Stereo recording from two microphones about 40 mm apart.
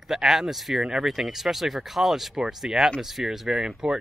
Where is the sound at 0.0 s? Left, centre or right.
Centre.